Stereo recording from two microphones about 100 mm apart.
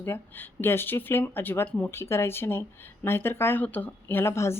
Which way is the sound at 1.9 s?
25° left (ahead or behind).